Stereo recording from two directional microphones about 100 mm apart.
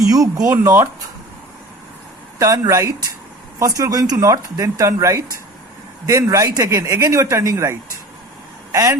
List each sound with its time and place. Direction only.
0.0 s speech: 35° right (ahead or behind)
2.4 s speech: 30° right (ahead or behind)